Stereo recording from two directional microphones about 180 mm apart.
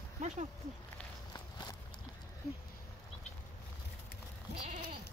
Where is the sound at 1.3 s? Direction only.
20° left (ahead or behind).